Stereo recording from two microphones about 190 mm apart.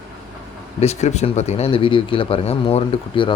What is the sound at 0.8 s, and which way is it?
Speech, 35° left (ahead or behind).